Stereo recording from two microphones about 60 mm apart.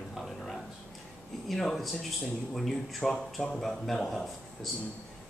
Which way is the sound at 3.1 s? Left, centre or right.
Centre.